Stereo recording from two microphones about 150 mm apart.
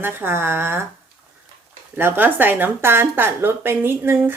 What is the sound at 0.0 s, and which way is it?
Speech, 15° right (ahead or behind).